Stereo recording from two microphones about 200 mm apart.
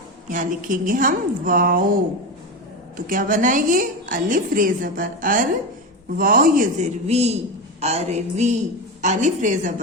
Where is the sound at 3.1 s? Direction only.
40° right (ahead or behind).